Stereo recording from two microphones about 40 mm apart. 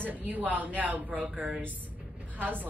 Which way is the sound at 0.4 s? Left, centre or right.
Right.